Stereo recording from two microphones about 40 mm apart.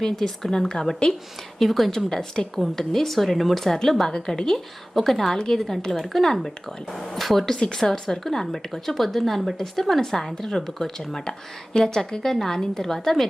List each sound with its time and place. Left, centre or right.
0.0 s a woman's voice: centre
1.5 s speech: centre
2.0 s a woman's voice: centre
4.0 s a woman's voice: centre
7.5 s a woman's voice: centre